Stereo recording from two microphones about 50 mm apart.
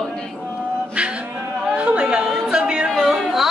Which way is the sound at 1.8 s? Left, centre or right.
Right.